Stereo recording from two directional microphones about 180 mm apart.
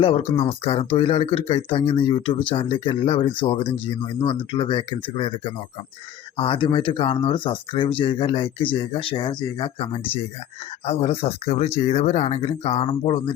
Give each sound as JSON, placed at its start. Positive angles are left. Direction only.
{"t": 0.0, "sound": "speech", "side_deg": 30}
{"t": 6.3, "sound": "speech", "side_deg": 30}